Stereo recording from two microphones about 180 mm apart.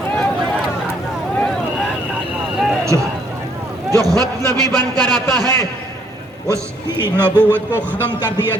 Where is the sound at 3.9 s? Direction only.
20° right (ahead or behind).